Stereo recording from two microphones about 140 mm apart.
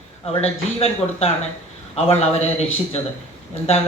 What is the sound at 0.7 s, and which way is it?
Speech, 45° left (ahead or behind).